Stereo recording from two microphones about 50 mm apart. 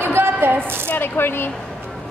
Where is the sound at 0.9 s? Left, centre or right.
Left.